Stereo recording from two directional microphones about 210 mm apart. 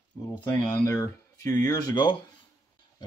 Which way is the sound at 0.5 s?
20° left (ahead or behind).